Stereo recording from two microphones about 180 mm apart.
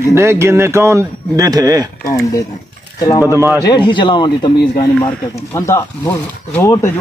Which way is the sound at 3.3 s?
15° right (ahead or behind).